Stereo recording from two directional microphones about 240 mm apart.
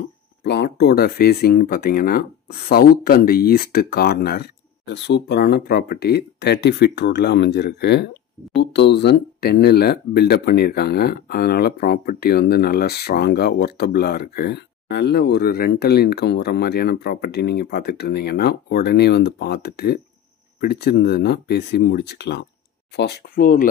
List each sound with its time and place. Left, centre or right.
0.4 s speech: left